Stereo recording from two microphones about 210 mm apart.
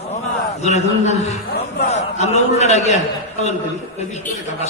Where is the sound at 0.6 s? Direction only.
30° left (ahead or behind).